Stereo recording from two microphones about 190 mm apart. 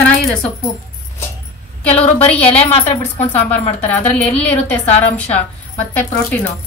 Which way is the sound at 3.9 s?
10° left (ahead or behind).